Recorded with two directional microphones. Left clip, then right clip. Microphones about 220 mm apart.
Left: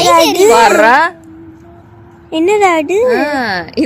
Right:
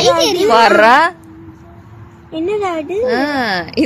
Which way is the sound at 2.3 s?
55° left (ahead or behind).